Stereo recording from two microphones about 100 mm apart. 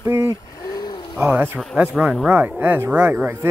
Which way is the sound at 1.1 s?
20° right (ahead or behind).